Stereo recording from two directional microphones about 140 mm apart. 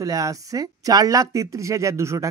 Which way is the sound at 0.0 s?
25° right (ahead or behind).